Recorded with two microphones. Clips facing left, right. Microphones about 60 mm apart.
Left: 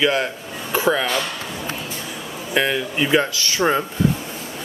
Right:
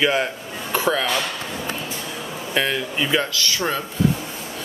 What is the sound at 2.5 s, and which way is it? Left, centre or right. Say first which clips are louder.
Speech: left 2 dB; centre.